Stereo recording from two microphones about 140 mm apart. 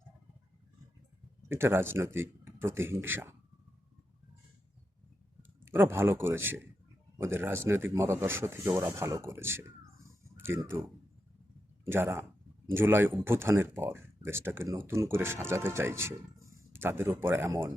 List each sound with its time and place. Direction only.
1.5 s speech: 15° right (ahead or behind)
5.4 s speech: 15° right (ahead or behind)
11.9 s speech: 15° right (ahead or behind)